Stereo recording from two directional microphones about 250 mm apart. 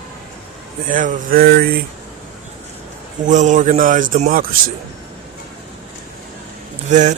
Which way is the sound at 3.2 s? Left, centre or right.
Right.